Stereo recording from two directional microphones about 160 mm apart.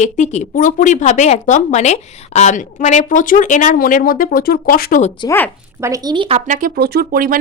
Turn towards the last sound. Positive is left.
turn(degrees=-65)  # may be behind; listen again after turning